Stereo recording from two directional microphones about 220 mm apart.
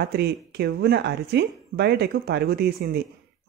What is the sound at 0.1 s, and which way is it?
Speech, 45° right (ahead or behind).